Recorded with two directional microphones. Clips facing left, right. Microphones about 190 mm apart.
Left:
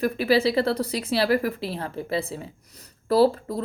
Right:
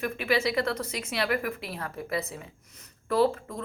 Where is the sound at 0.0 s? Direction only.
35° left (ahead or behind).